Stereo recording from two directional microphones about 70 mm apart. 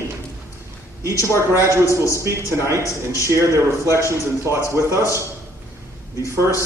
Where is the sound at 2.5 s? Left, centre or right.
Right.